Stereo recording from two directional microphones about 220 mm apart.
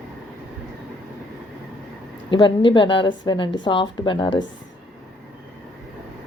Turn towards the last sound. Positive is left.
turn(degrees=55)  # may be behind; listen again after turning